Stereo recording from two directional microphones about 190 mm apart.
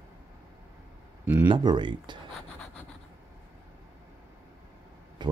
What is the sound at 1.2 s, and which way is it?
Speech, 10° right (ahead or behind).